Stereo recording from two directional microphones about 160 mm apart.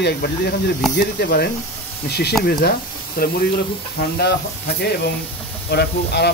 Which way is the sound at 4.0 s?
80° left.